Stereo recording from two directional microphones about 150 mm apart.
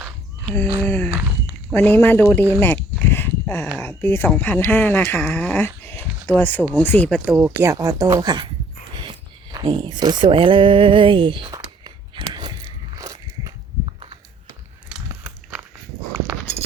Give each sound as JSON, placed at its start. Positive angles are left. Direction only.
{"t": 0.4, "sound": "speech", "side_deg": 15}
{"t": 3.0, "sound": "dog", "side_deg": 15}
{"t": 3.8, "sound": "speech", "side_deg": 15}
{"t": 7.3, "sound": "speech", "side_deg": -5}
{"t": 7.6, "sound": "speech", "side_deg": -20}
{"t": 9.0, "sound": "a sound", "side_deg": -30}
{"t": 9.6, "sound": "speech", "side_deg": -35}
{"t": 11.5, "sound": "biting", "side_deg": -25}
{"t": 13.8, "sound": "a sound", "side_deg": -35}
{"t": 15.1, "sound": "biting", "side_deg": -10}